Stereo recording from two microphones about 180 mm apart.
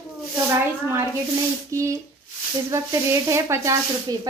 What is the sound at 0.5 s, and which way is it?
Speech, 15° right (ahead or behind).